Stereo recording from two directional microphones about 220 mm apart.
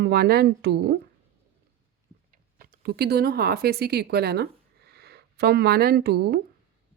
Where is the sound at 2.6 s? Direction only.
45° right (ahead or behind).